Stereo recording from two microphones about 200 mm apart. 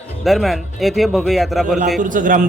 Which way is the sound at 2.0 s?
40° right (ahead or behind).